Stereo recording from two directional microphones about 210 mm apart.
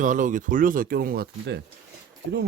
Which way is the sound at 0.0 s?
40° right (ahead or behind).